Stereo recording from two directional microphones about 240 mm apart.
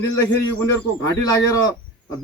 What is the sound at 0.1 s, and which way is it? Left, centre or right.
A man's voice, centre.